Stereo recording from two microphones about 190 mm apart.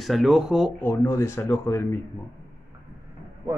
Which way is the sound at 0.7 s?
15° left (ahead or behind).